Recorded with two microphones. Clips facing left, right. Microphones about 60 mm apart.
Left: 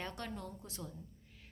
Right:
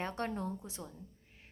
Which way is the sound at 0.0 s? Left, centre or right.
Right.